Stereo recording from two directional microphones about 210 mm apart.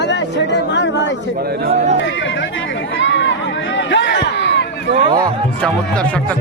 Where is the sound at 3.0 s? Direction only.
60° left (ahead or behind).